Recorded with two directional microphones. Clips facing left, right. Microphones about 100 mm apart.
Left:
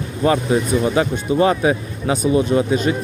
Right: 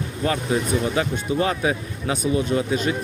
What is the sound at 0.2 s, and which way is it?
Speech, 25° left (ahead or behind).